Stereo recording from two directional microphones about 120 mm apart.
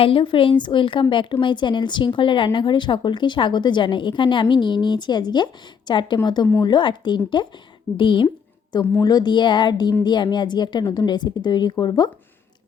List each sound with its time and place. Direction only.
0.0 s a woman's voice: 45° left (ahead or behind)